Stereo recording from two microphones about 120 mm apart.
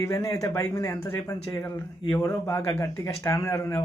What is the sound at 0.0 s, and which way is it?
Speech, 30° left (ahead or behind).